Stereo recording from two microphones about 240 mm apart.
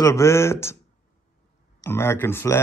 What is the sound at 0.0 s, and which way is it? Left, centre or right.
Speech, centre.